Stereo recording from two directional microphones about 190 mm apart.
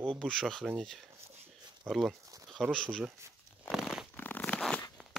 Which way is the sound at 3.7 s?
Centre (ahead or behind).